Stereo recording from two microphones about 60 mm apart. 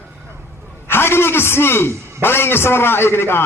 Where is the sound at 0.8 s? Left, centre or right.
Left.